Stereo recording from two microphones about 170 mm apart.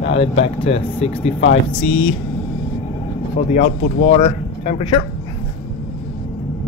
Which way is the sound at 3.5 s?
50° left (ahead or behind).